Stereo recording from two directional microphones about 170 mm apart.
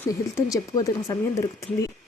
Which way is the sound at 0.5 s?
20° left (ahead or behind).